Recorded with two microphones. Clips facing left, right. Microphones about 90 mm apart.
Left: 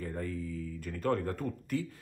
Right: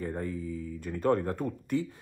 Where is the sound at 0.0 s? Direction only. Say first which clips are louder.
Right 3 dB; 25° right (ahead or behind).